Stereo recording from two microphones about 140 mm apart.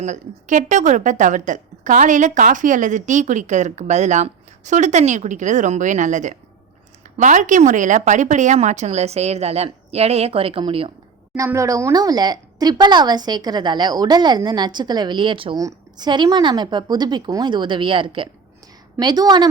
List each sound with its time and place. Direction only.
0.0 s a woman's voice: 60° right (ahead or behind); by 10.9 s 40° right (ahead or behind)
11.3 s a woman's voice: 20° right (ahead or behind)